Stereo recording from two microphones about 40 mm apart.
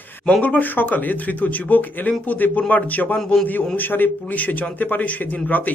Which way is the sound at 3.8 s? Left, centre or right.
Left.